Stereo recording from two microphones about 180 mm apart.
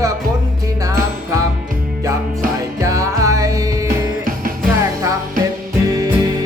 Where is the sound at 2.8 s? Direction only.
15° right (ahead or behind).